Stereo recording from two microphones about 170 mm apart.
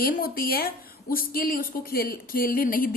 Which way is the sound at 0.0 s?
60° left (ahead or behind).